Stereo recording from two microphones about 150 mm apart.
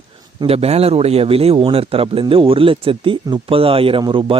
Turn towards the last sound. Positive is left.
turn(degrees=-35)  # may be behind; listen again after turning